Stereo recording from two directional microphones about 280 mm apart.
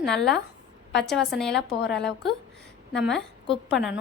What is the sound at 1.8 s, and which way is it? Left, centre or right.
Speech, left.